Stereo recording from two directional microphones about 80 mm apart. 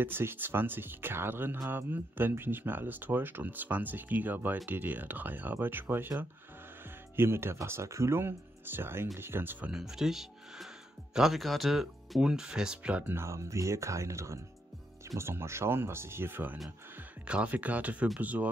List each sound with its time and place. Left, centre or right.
0.0 s speech: right
9.7 s speech: centre
13.1 s speech: right; by 18.5 s centre